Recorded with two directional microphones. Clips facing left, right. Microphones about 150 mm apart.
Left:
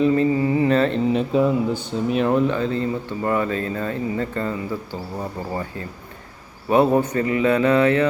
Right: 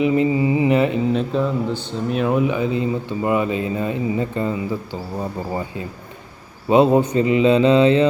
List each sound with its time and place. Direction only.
0.0 s mantra: 15° right (ahead or behind)
1.0 s speech: 5° left (ahead or behind); by 8.0 s 20° right (ahead or behind)